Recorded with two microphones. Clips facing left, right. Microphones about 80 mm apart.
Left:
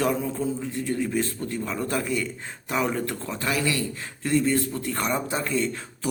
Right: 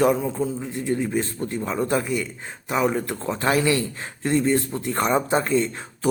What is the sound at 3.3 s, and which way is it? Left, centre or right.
A man's voice, right.